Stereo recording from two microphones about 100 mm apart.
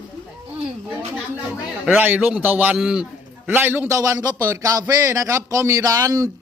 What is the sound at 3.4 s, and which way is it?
Speech, 20° right (ahead or behind).